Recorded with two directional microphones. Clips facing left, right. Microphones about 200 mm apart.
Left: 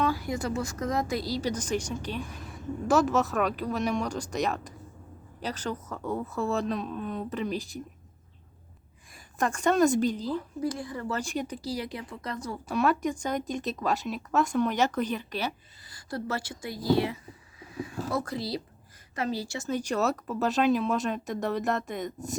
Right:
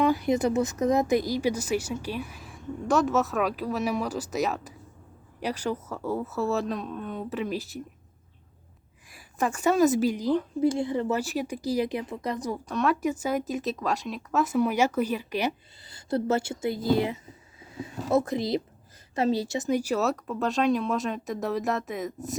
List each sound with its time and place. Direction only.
0.0 s speech: 20° right (ahead or behind); by 7.8 s 5° right (ahead or behind)
9.1 s a woman's voice: 5° right (ahead or behind)
10.6 s a woman's voice: 25° right (ahead or behind)
11.1 s speech: 5° right (ahead or behind)
12.6 s speech: 5° left (ahead or behind)
15.9 s a woman's voice: 25° right (ahead or behind)
17.6 s a sound: 25° right (ahead or behind)
18.1 s a woman's voice: 20° right (ahead or behind); by 22.4 s centre (ahead or behind)